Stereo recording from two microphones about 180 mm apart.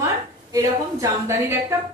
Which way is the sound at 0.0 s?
20° right (ahead or behind).